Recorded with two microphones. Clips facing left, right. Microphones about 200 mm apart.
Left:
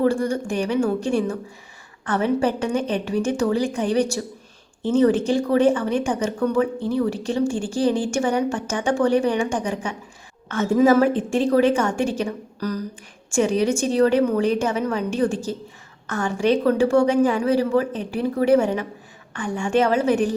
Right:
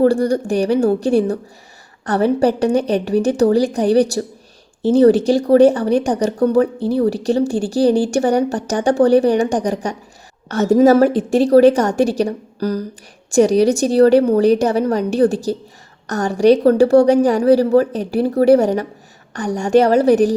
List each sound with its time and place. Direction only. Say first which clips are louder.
0.0 s speech: right 6 dB; 35° right (ahead or behind)